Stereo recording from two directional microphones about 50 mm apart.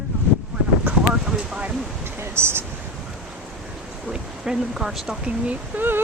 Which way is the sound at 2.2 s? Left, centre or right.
Right.